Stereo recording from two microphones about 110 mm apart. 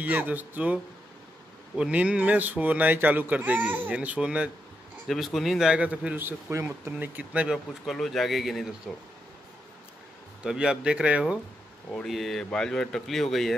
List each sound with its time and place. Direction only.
0.0 s speech: 15° right (ahead or behind)
1.8 s speech: 10° right (ahead or behind)
5.0 s speech: centre (ahead or behind)
7.5 s speech: centre (ahead or behind)
10.4 s speech: 5° right (ahead or behind)
11.9 s speech: 5° left (ahead or behind)